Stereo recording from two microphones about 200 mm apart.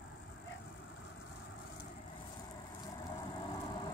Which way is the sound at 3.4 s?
25° left (ahead or behind).